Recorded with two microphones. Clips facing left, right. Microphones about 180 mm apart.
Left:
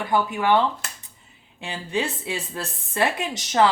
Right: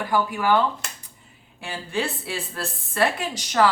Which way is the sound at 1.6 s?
20° left (ahead or behind).